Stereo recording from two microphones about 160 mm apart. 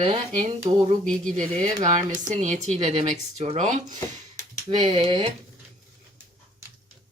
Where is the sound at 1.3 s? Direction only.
50° right (ahead or behind).